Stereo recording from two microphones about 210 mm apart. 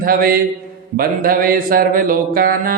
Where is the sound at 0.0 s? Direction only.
45° right (ahead or behind).